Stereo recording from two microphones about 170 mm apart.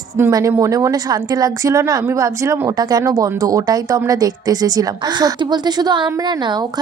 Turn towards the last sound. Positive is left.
turn(degrees=-25)  # may be behind; listen again after turning